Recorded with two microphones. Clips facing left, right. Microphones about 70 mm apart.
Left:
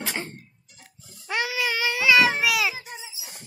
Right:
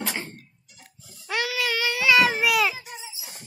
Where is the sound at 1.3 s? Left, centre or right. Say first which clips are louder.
Even; centre.